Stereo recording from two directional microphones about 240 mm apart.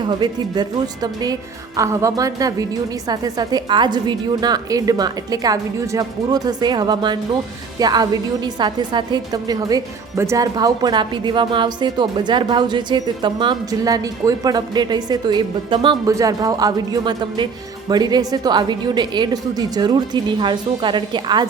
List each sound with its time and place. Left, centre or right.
0.0 s a woman's voice: centre